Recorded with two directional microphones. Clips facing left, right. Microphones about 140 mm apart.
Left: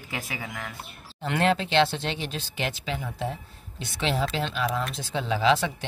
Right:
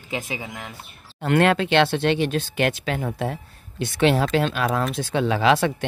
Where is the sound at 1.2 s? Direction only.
60° right (ahead or behind).